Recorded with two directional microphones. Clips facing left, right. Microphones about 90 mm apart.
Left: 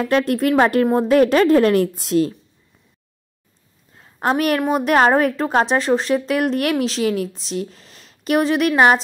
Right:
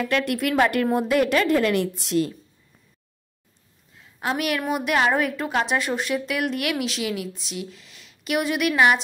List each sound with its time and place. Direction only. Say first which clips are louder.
0.0 s a woman's voice: left 6 dB; 35° left (ahead or behind)
3.9 s a woman's voice: left 7 dB; 40° left (ahead or behind)